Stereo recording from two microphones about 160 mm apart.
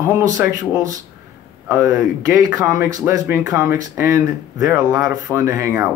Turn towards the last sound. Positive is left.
turn(degrees=-20)  # may be behind; listen again after turning